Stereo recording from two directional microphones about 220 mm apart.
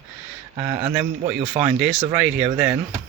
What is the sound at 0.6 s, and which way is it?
Speech, 20° right (ahead or behind).